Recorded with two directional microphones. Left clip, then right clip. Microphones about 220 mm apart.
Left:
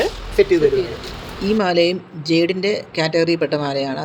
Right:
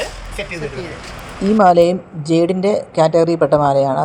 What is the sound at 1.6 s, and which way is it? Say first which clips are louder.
Speech: right 8 dB; 20° right (ahead or behind).